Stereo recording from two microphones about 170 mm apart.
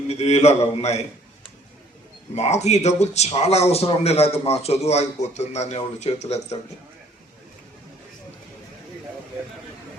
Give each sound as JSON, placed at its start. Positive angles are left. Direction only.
{"t": 0.1, "sound": "a man's voice", "side_deg": 40}
{"t": 2.3, "sound": "a man's voice", "side_deg": 40}